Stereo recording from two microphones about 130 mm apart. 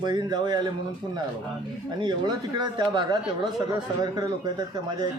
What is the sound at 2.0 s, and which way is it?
Speech, 35° right (ahead or behind).